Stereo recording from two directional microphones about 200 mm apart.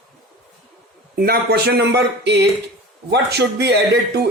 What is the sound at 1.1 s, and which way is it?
Speech, 50° right (ahead or behind).